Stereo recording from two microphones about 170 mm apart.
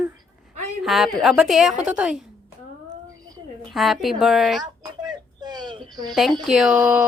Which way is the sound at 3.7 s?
Centre (ahead or behind).